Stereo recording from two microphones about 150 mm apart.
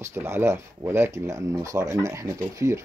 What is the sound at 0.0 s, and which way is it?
Speech, 15° right (ahead or behind).